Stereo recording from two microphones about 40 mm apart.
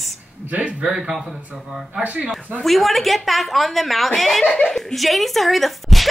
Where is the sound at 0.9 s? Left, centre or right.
Centre.